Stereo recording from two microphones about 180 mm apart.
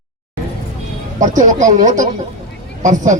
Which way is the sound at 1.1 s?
45° right (ahead or behind).